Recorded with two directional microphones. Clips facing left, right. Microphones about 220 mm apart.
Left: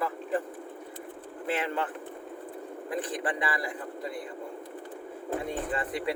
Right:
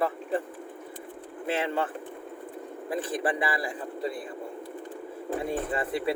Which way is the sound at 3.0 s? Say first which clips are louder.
Right 5 dB; 25° right (ahead or behind).